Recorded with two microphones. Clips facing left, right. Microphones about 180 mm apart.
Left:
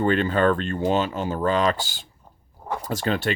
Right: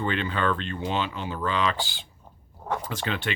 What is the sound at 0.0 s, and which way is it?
A man's voice, 45° left (ahead or behind).